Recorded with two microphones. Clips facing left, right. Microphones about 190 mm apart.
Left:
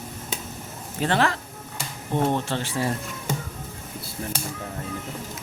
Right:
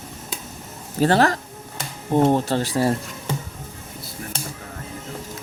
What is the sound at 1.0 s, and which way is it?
Speech, 40° right (ahead or behind).